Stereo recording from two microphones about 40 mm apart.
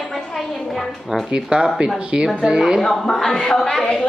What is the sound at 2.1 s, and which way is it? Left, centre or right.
Speech, right.